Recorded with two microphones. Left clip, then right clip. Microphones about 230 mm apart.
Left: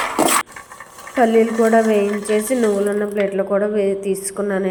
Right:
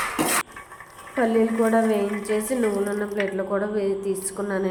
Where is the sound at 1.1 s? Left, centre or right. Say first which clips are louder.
Left 7 dB; left.